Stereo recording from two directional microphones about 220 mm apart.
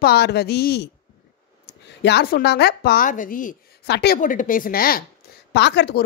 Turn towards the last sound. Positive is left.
turn(degrees=50)  # may be behind; listen again after turning